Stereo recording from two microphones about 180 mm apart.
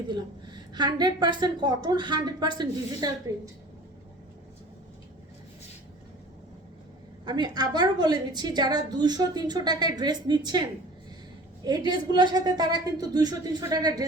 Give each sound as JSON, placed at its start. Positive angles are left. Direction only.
{"t": 0.1, "sound": "a woman's voice", "side_deg": -25}
{"t": 7.3, "sound": "a woman's voice", "side_deg": -25}
{"t": 11.6, "sound": "a woman's voice", "side_deg": -25}